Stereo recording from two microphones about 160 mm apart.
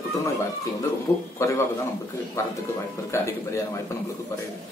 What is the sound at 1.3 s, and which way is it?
Speech, 20° left (ahead or behind).